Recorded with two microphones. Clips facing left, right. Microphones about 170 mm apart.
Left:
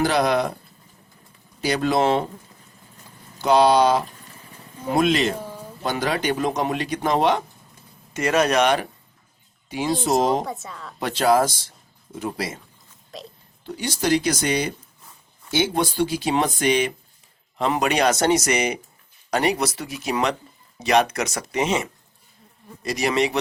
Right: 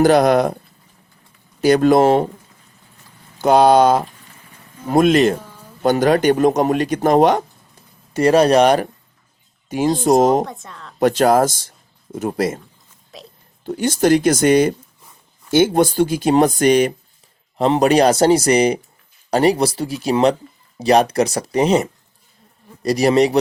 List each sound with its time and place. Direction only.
0.0 s speech: 50° right (ahead or behind)
1.6 s speech: 50° right (ahead or behind)
3.3 s speech: 50° right (ahead or behind)
8.1 s speech: 35° right (ahead or behind)
10.4 s a woman's voice: 5° left (ahead or behind)
11.0 s speech: 45° right (ahead or behind)
13.1 s a woman's voice: centre (ahead or behind)
13.7 s speech: 50° right (ahead or behind)